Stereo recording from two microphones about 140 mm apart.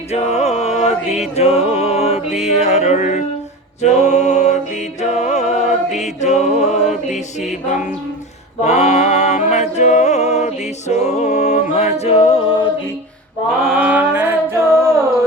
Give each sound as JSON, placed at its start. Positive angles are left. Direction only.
{"t": 0.1, "sound": "music", "side_deg": 50}
{"t": 8.6, "sound": "a capella", "side_deg": 55}
{"t": 13.6, "sound": "mantra", "side_deg": -5}